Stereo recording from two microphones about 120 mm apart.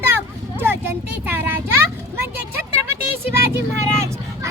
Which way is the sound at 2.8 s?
20° right (ahead or behind).